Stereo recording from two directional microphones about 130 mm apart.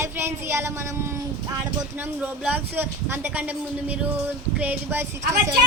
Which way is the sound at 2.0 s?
10° right (ahead or behind).